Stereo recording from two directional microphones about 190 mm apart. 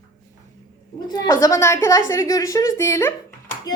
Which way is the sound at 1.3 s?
20° left (ahead or behind).